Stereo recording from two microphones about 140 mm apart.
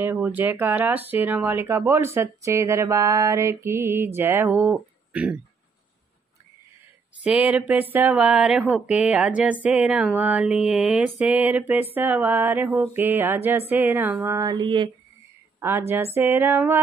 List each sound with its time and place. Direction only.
0.0 s speech: 15° right (ahead or behind)
7.2 s speech: 10° right (ahead or behind)
14.6 s speech: 35° right (ahead or behind)
16.2 s speech: 15° right (ahead or behind)